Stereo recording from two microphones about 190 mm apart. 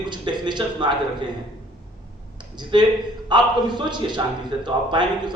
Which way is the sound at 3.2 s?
25° right (ahead or behind).